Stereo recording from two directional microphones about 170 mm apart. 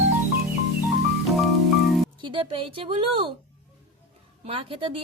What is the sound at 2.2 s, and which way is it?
A woman's voice, 30° right (ahead or behind).